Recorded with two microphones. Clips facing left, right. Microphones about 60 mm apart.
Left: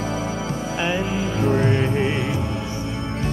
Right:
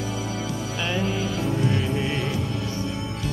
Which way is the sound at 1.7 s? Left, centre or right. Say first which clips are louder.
Left 4 dB; left.